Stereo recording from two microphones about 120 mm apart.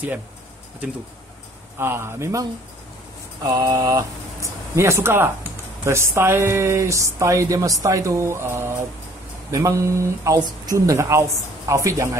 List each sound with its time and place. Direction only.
1.8 s speech: 20° right (ahead or behind)
3.4 s speech: 30° right (ahead or behind)